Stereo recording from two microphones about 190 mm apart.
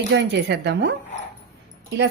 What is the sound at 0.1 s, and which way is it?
Speech, 65° right (ahead or behind).